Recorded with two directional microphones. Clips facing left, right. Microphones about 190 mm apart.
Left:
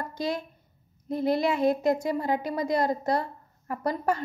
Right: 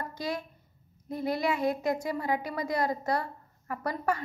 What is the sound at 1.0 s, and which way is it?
A woman's voice, 25° left (ahead or behind).